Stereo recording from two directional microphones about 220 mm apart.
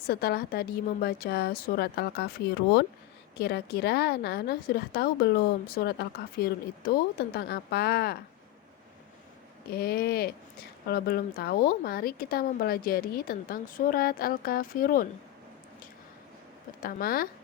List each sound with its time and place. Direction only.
0.1 s a woman's voice: 45° left (ahead or behind)
3.3 s a woman's voice: 45° left (ahead or behind)
9.6 s a woman's voice: 45° left (ahead or behind)
16.8 s speech: 40° left (ahead or behind)